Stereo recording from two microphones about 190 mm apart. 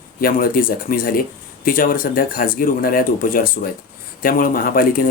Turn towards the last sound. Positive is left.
turn(degrees=50)  # may be behind; listen again after turning